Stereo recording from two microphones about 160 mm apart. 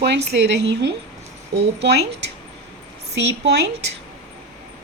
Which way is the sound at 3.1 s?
90° right.